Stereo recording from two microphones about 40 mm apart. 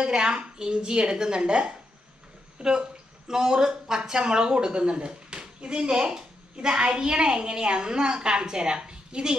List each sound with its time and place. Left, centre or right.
0.0 s speech: centre